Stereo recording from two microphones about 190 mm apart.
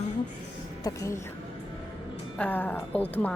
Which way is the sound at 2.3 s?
10° left (ahead or behind).